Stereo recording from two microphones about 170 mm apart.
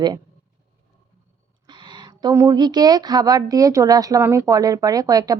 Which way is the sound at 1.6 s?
25° right (ahead or behind).